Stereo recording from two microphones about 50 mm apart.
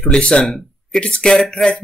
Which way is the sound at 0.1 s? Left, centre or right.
Centre.